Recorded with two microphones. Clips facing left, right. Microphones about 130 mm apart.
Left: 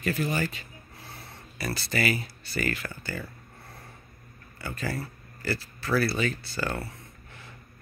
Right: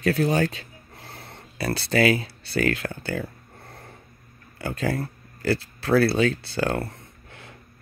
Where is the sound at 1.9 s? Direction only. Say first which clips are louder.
Right 8 dB; 90° right.